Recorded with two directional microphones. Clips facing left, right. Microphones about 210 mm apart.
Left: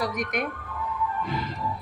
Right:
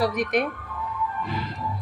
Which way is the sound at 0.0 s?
35° right (ahead or behind).